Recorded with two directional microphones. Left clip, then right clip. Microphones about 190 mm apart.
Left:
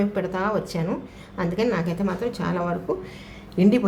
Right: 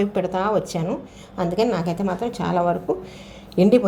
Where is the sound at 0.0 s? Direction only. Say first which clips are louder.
Right 3 dB; 15° right (ahead or behind).